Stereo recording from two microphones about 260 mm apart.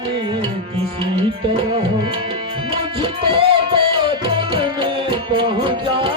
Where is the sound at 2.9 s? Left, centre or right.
Centre.